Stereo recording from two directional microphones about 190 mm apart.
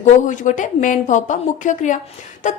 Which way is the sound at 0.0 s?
40° left (ahead or behind).